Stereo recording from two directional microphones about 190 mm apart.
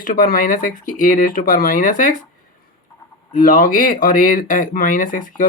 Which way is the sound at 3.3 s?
45° left (ahead or behind).